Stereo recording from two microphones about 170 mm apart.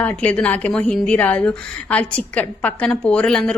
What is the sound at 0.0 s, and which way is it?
A woman's voice, 10° left (ahead or behind).